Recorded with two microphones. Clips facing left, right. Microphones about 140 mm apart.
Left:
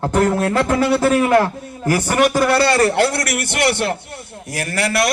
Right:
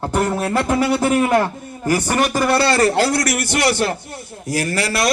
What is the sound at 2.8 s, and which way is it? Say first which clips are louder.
A man's voice: even; 55° left (ahead or behind).